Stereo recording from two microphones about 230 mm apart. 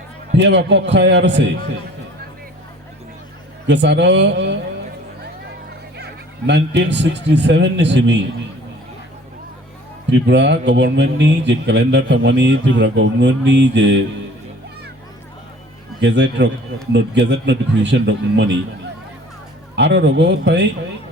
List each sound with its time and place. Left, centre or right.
0.3 s a man's voice: right
3.7 s a man's voice: right
6.5 s a man's voice: right
10.1 s a man's voice: right
16.0 s a man's voice: right
19.7 s a man's voice: right